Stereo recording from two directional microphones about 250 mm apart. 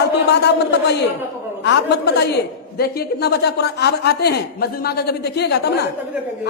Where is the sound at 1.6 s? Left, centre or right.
Left.